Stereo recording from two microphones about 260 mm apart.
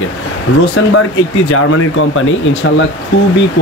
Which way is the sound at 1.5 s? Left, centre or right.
Left.